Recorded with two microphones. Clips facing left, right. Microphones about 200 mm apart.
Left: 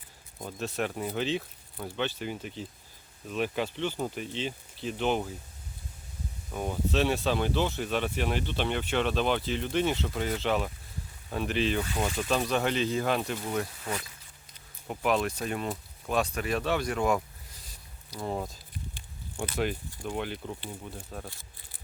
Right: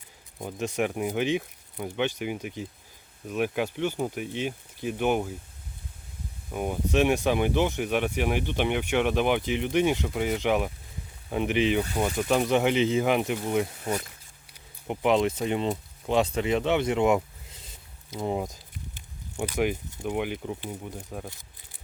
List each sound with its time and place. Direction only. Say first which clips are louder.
0.3 s speech: right 4 dB; 15° right (ahead or behind)
6.5 s speech: right 3 dB; 15° right (ahead or behind)